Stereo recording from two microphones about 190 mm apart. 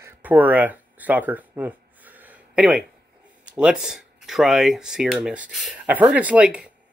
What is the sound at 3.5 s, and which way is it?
Speech, 5° right (ahead or behind).